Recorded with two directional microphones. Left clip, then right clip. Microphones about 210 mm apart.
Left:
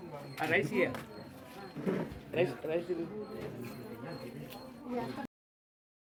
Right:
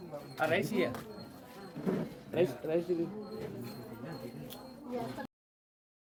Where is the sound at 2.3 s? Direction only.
40° right (ahead or behind).